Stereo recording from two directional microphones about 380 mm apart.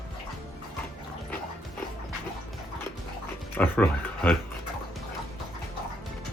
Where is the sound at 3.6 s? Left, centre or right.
Centre.